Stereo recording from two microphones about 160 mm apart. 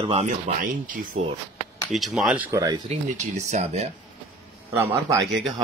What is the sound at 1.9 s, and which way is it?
Speech, centre (ahead or behind).